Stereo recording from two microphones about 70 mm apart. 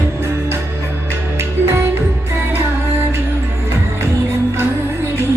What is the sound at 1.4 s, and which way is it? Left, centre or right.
Music, right.